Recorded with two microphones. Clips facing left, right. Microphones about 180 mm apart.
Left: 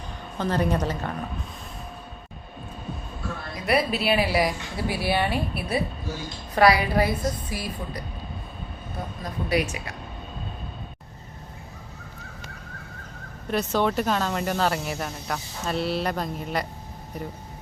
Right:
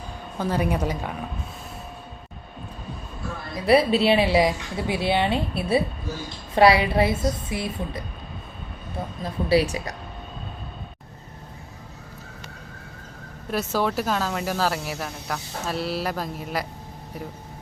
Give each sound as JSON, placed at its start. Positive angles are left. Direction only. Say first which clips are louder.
{"t": 0.3, "sound": "a woman's voice", "louder": "even", "side_deg": -10}
{"t": 3.5, "sound": "a woman's voice", "louder": "right 6 dB", "side_deg": -30}
{"t": 9.2, "sound": "speech", "louder": "right 5 dB", "side_deg": -30}
{"t": 13.5, "sound": "speech", "louder": "left 1 dB", "side_deg": -5}